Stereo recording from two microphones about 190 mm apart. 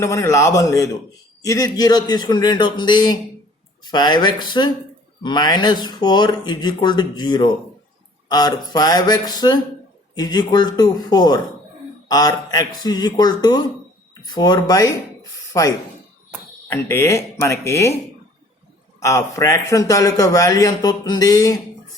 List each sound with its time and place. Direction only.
0.0 s a man's voice: 15° left (ahead or behind)
15.2 s a sound: 20° left (ahead or behind)
16.6 s a man's voice: 15° left (ahead or behind)
18.9 s a man's voice: 15° left (ahead or behind)